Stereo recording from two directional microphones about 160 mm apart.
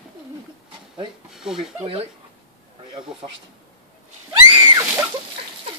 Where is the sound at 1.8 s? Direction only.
40° right (ahead or behind).